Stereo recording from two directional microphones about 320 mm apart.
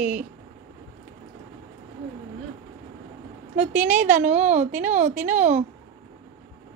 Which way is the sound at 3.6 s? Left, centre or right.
Right.